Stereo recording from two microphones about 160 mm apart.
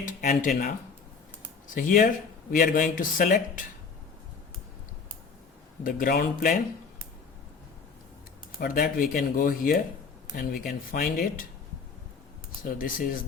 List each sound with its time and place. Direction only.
0.0 s speech: 60° left (ahead or behind)
1.7 s speech: 55° left (ahead or behind)
5.8 s speech: 60° left (ahead or behind)
8.5 s speech: 60° left (ahead or behind)
12.8 s speech: 60° left (ahead or behind)